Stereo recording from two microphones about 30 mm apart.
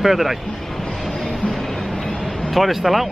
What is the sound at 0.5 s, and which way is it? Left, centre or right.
Train, centre.